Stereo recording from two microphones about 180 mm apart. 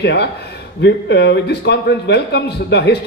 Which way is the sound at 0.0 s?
65° left (ahead or behind).